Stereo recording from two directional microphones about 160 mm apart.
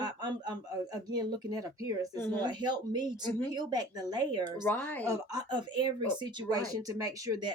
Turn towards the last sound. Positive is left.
turn(degrees=-25)  # may be behind; listen again after turning